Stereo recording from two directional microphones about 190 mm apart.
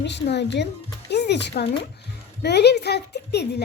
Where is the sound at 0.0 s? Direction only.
65° left (ahead or behind).